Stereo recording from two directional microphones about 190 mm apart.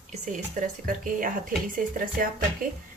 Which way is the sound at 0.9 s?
45° right (ahead or behind).